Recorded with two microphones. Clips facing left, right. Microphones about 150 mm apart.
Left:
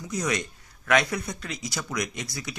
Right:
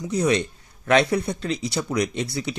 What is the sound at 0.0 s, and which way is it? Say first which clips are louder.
Speech: right 7 dB; 30° right (ahead or behind).